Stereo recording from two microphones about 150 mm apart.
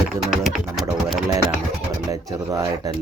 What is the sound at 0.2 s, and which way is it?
Music, centre (ahead or behind).